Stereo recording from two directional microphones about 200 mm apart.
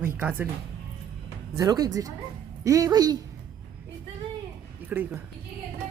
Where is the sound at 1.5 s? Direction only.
20° right (ahead or behind).